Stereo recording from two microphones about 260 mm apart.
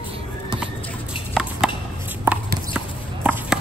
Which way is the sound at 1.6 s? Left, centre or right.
Centre.